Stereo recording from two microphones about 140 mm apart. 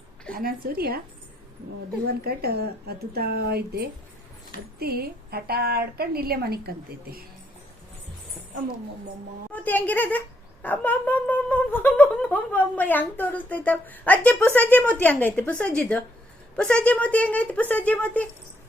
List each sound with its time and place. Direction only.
0.3 s a woman's voice: 90° right
2.0 s a woman's voice: 90° right
4.8 s a woman's voice: 90° right
9.5 s speech: 10° left (ahead or behind)